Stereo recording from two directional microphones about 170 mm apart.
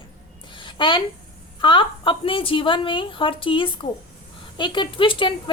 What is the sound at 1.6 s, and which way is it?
A woman's voice, 30° left (ahead or behind).